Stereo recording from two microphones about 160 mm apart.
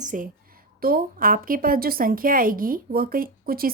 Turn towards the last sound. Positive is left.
turn(degrees=-65)  # may be behind; listen again after turning